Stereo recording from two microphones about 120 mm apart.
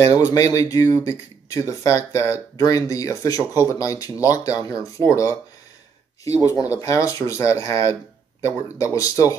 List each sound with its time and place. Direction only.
0.1 s speech: 25° left (ahead or behind)